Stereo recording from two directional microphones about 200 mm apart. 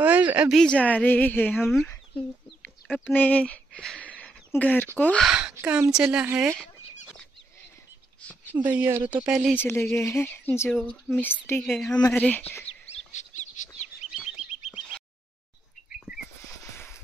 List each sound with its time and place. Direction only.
0.0 s a woman's voice: 10° right (ahead or behind)
4.2 s a sound: 10° left (ahead or behind)
4.9 s a woman's voice: 5° left (ahead or behind); by 6.6 s 10° right (ahead or behind)
8.6 s a woman's voice: 10° right (ahead or behind)
9.6 s speech: 10° left (ahead or behind)
10.8 s a woman's voice: centre (ahead or behind)
11.2 s speech: 10° left (ahead or behind)
12.9 s bird: 35° left (ahead or behind)
14.1 s frog: 5° right (ahead or behind)
14.7 s a sound: 5° right (ahead or behind)
16.1 s a sound: 10° right (ahead or behind)
16.4 s a sound: 15° left (ahead or behind)